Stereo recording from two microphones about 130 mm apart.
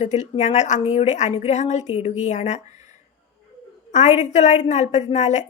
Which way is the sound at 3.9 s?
65° left (ahead or behind).